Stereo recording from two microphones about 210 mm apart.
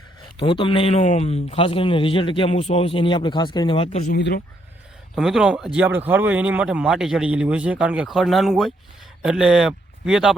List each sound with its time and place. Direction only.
0.3 s speech: 25° left (ahead or behind)
4.1 s speech: 50° left (ahead or behind)
5.1 s speech: centre (ahead or behind)